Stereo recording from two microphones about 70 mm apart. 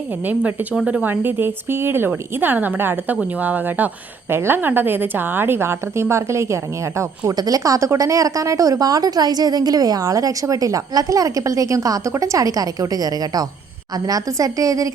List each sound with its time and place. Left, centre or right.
0.3 s a woman's voice: right
7.3 s speech: right